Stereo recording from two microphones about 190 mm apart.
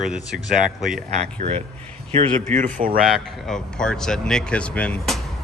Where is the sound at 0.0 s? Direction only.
Centre (ahead or behind).